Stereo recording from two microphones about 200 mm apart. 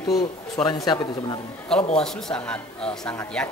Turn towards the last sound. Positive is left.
turn(degrees=10)  # may be behind; listen again after turning